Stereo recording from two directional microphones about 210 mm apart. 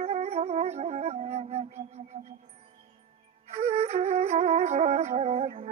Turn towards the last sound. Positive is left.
turn(degrees=-35)  # may be behind; listen again after turning